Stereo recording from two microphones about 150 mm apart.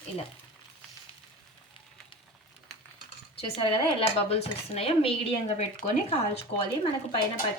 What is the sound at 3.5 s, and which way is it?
Speech, 40° left (ahead or behind).